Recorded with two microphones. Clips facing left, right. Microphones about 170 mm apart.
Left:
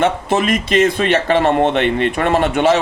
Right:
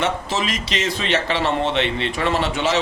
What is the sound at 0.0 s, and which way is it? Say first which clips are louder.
Speech: left 7 dB; 55° left (ahead or behind).